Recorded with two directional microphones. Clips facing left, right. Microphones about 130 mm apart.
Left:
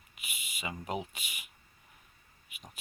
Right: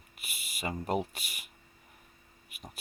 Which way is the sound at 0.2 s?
40° right (ahead or behind).